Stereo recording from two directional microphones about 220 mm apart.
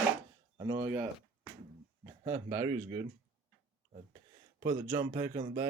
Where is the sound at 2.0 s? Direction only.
10° right (ahead or behind).